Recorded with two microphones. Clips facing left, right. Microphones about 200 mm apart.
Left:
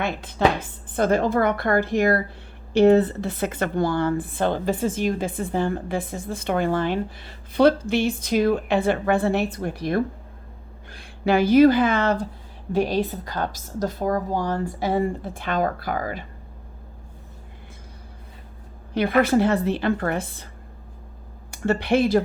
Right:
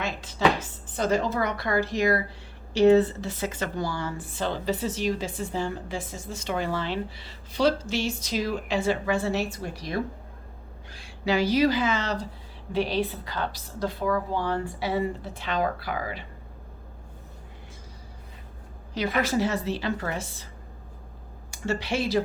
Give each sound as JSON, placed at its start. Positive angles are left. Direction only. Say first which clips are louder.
{"t": 0.0, "sound": "a woman's voice", "louder": "left 3 dB", "side_deg": 55}
{"t": 18.9, "sound": "speech", "louder": "left 7 dB", "side_deg": 55}
{"t": 21.5, "sound": "speech", "louder": "left 7 dB", "side_deg": 55}